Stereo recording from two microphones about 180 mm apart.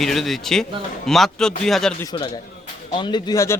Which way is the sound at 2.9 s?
25° left (ahead or behind).